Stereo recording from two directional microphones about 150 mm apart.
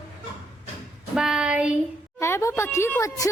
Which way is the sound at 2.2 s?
20° left (ahead or behind).